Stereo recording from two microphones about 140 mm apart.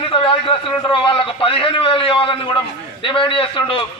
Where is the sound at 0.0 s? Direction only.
40° left (ahead or behind).